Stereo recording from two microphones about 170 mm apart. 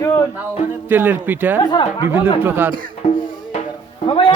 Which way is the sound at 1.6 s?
25° left (ahead or behind).